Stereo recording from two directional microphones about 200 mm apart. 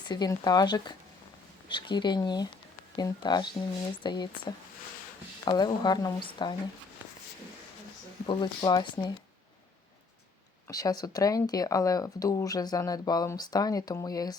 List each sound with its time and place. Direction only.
0.1 s speech: 20° left (ahead or behind)
8.3 s speech: 20° left (ahead or behind)
10.7 s speech: 20° left (ahead or behind)